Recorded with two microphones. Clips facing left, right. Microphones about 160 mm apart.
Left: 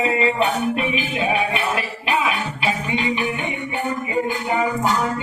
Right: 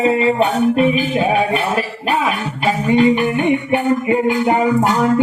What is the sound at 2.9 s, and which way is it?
Music, 50° right (ahead or behind).